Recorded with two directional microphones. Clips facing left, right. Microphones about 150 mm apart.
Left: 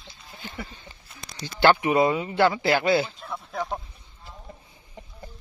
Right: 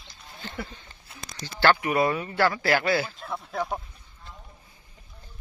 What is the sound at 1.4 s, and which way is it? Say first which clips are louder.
Speech: left 3 dB; 20° left (ahead or behind).